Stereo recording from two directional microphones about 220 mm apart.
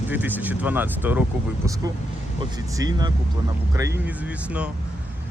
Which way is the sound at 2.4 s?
15° right (ahead or behind).